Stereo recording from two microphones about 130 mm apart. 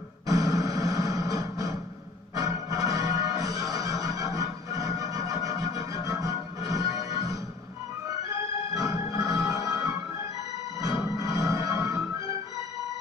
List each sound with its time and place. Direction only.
0.3 s music: 25° right (ahead or behind)
8.8 s music: 25° right (ahead or behind)
11.1 s music: 25° right (ahead or behind)